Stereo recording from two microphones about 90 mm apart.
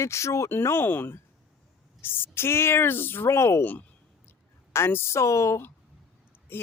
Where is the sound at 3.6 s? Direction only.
20° left (ahead or behind).